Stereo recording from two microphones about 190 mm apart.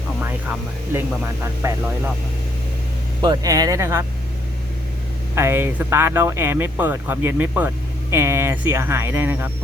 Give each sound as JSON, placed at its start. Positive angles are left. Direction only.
{"t": 1.6, "sound": "speech", "side_deg": -15}
{"t": 3.2, "sound": "speech", "side_deg": -20}
{"t": 5.3, "sound": "speech", "side_deg": -15}